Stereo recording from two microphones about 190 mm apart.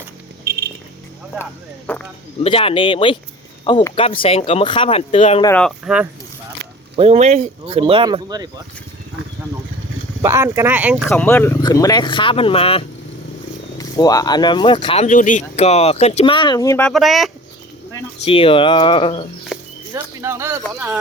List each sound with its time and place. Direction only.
0.5 s music: 55° right (ahead or behind)
1.9 s a sound: 10° left (ahead or behind)
2.4 s speech: 30° left (ahead or behind)
5.5 s speech: 5° left (ahead or behind)
5.8 s speech: 5° right (ahead or behind)
6.9 s speech: 30° right (ahead or behind)
10.2 s speech: 15° right (ahead or behind)
11.1 s speech: 10° left (ahead or behind); by 12.8 s 30° left (ahead or behind)
13.7 s speech: 20° left (ahead or behind)
16.9 s speech: centre (ahead or behind)
18.3 s speech: 30° left (ahead or behind)
19.5 s a sound: centre (ahead or behind)
19.9 s speech: 15° right (ahead or behind)